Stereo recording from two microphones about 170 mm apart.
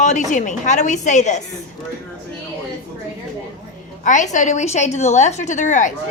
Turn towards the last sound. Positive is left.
turn(degrees=45)  # may be behind; listen again after turning